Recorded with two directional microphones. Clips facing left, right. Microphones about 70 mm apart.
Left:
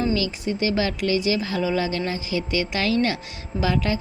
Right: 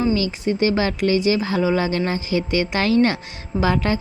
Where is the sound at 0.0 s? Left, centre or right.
Right.